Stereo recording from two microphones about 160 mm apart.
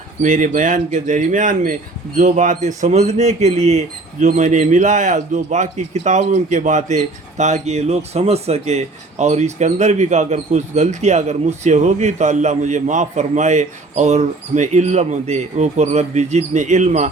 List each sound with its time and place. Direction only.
0.2 s speech: 55° right (ahead or behind)